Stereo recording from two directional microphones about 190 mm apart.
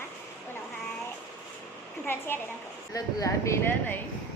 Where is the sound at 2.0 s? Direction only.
10° left (ahead or behind).